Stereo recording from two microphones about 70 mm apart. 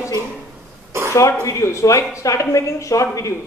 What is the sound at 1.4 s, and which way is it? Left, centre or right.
A man's voice, left.